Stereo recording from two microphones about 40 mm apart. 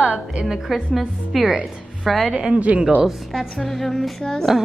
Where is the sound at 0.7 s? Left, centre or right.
Centre.